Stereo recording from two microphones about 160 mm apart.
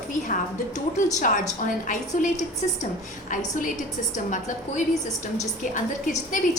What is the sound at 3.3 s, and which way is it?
A woman's voice, 55° left (ahead or behind).